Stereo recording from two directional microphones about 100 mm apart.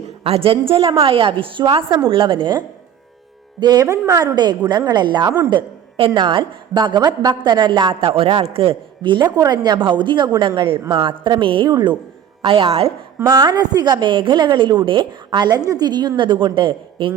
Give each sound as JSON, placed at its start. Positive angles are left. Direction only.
{"t": 0.3, "sound": "a woman's voice", "side_deg": -75}
{"t": 12.4, "sound": "speech", "side_deg": -65}
{"t": 13.2, "sound": "a woman's voice", "side_deg": -45}